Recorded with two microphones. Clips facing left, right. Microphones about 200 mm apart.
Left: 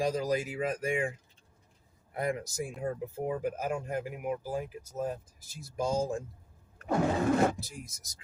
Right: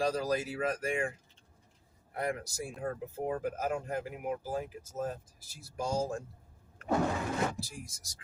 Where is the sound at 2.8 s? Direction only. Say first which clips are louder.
Left 1 dB; 10° left (ahead or behind).